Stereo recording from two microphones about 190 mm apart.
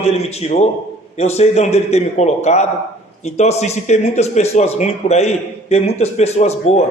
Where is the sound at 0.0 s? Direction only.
35° left (ahead or behind).